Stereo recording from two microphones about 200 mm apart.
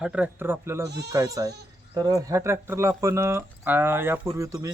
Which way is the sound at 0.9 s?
55° right (ahead or behind).